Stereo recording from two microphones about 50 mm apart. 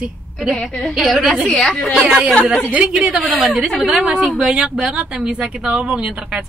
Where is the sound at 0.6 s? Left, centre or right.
Centre.